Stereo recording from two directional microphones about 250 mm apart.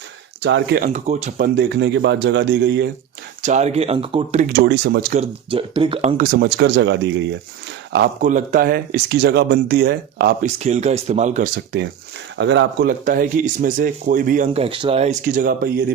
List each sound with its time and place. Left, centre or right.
0.4 s a man's voice: right
0.9 s speech: right
1.5 s a man's voice: right
3.4 s speech: right
4.6 s a man's voice: right
5.5 s speech: right
8.2 s speech: right
10.4 s speech: right
12.4 s speech: right